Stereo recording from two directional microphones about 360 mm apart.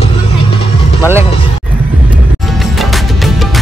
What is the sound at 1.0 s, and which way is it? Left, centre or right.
Speech, centre.